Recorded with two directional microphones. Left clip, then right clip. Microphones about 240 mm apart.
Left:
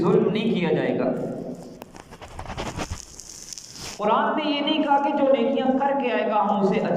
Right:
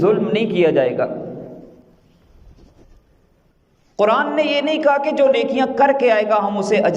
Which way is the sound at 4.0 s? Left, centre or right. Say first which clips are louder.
Right 6 dB; right.